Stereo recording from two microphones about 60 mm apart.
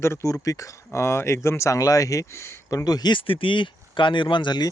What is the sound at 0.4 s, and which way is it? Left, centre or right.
Speech, left.